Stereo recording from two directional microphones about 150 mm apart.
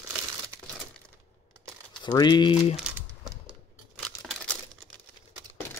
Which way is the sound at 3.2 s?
Centre (ahead or behind).